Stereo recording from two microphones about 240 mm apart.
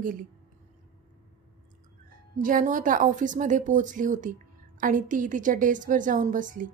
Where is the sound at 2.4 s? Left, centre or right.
Right.